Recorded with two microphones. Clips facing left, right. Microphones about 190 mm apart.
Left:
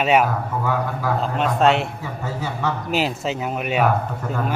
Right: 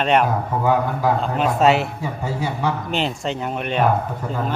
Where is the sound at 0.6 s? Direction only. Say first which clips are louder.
Right 6 dB; 20° right (ahead or behind).